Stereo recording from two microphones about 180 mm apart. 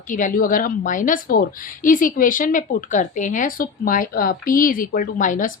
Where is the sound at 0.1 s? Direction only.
45° left (ahead or behind).